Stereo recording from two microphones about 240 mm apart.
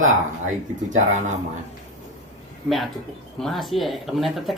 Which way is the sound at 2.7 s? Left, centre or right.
Centre.